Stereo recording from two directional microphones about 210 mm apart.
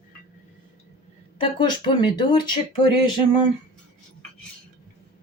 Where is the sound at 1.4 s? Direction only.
20° left (ahead or behind).